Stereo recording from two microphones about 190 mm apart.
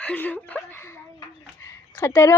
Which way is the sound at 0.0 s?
10° left (ahead or behind).